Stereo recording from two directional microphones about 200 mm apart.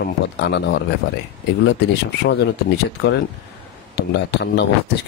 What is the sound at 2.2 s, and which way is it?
Speech, 55° left (ahead or behind).